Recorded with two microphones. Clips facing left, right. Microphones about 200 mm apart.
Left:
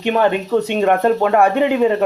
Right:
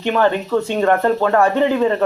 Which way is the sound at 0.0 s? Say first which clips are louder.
Left 1 dB; 15° left (ahead or behind).